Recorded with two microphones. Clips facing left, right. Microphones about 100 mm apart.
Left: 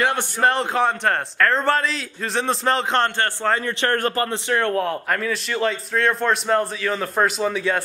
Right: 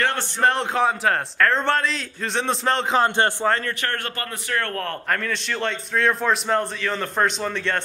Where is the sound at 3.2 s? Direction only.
20° right (ahead or behind).